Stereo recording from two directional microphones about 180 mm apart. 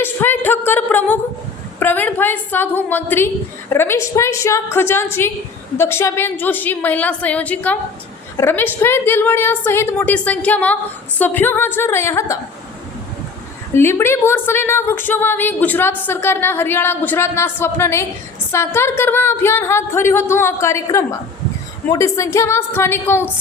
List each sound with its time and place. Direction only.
0.0 s a sound: 10° left (ahead or behind)
1.8 s a woman's voice: 10° left (ahead or behind)
13.7 s a woman's voice: 15° left (ahead or behind)